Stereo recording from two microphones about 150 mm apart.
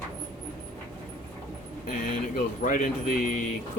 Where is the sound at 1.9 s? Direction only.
55° left (ahead or behind).